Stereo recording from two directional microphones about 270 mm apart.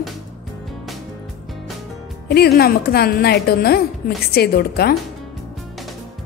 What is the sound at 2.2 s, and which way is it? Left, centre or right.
A woman's voice, left.